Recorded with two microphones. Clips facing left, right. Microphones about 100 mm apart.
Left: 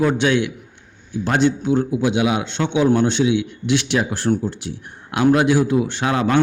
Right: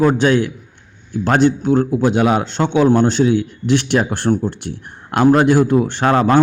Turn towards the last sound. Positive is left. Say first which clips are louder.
# right 5 dB
turn(degrees=-45)  # may be behind; listen again after turning